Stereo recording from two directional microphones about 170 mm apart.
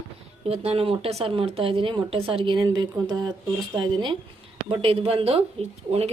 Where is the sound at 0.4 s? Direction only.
35° right (ahead or behind).